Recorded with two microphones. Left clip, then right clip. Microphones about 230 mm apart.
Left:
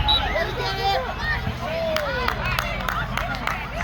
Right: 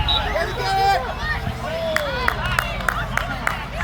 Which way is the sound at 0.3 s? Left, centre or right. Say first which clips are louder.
Right 4 dB; right.